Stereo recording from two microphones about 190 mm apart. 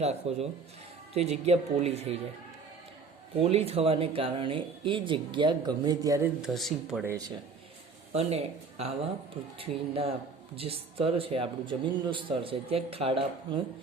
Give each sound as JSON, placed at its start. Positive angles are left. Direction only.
{"t": 0.0, "sound": "speech", "side_deg": -35}
{"t": 3.3, "sound": "speech", "side_deg": -30}
{"t": 6.4, "sound": "speech", "side_deg": 0}
{"t": 7.0, "sound": "speech", "side_deg": -15}
{"t": 8.1, "sound": "speech", "side_deg": -35}